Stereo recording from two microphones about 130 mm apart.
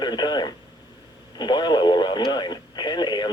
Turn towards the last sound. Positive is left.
turn(degrees=35)  # may be behind; listen again after turning